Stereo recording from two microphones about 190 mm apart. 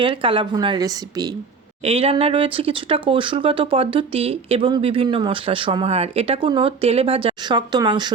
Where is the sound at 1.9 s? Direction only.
30° right (ahead or behind).